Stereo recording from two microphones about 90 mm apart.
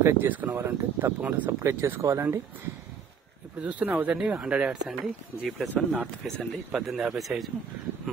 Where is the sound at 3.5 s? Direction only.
15° right (ahead or behind).